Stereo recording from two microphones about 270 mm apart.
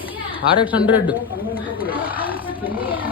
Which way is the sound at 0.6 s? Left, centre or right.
Centre.